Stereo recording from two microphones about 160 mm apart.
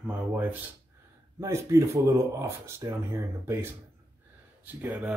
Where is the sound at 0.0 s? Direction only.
10° right (ahead or behind).